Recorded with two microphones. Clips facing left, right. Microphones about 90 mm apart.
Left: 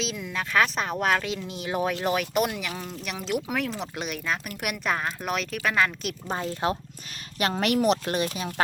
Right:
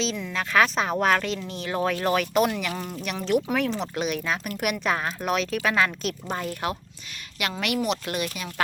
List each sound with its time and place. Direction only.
0.0 s speech: 5° left (ahead or behind)
6.3 s speech: 25° left (ahead or behind)
7.5 s speech: 40° left (ahead or behind)